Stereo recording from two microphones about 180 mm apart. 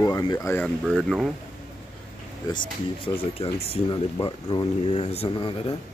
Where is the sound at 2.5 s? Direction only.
30° left (ahead or behind).